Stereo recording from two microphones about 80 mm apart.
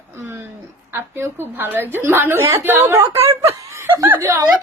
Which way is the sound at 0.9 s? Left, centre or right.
Right.